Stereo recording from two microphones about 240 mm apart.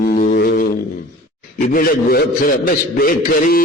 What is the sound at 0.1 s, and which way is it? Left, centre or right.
Guitar, left.